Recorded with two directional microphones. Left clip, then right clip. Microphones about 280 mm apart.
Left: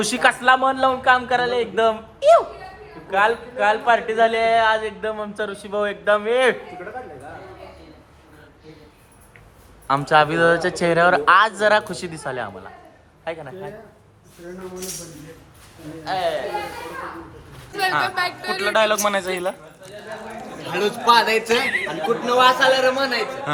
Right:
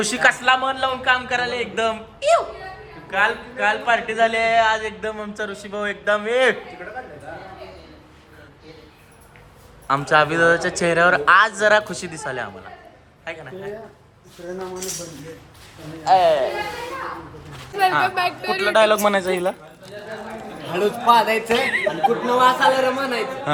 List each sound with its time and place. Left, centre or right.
0.0 s speech: centre
9.8 s speech: centre
16.0 s speech: centre
17.7 s speech: centre
18.1 s speech: right
18.7 s speech: centre
20.7 s speech: centre
21.5 s speech: right
22.4 s speech: centre